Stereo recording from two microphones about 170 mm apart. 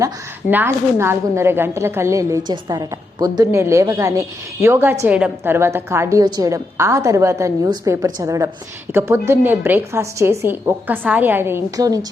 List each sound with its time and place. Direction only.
0.5 s a woman's voice: 15° right (ahead or behind)